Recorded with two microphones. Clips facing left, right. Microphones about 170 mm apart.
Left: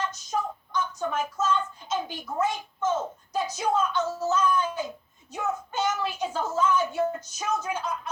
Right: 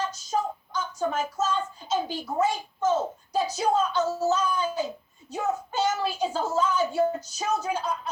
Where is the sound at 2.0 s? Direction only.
35° right (ahead or behind).